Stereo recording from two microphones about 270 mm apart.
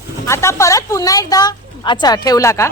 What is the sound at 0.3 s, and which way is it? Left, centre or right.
A woman's voice, centre.